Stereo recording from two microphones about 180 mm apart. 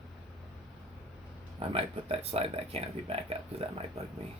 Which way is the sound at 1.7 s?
30° right (ahead or behind).